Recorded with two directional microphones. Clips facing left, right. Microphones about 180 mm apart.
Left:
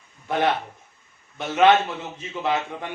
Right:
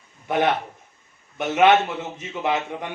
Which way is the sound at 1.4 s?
15° right (ahead or behind).